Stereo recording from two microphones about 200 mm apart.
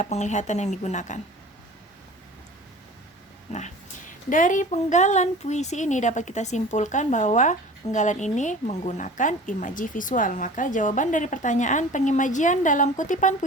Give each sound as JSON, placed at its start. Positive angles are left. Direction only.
{"t": 0.0, "sound": "a woman's voice", "side_deg": 35}
{"t": 3.5, "sound": "a woman's voice", "side_deg": 40}